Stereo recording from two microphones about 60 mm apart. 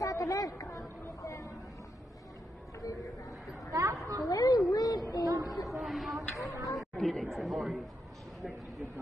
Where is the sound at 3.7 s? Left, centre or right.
Right.